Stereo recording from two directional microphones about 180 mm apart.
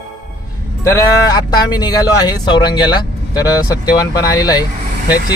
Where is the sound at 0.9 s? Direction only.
20° left (ahead or behind).